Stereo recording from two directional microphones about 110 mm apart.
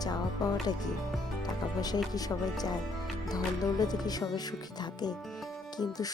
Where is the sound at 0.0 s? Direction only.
35° left (ahead or behind).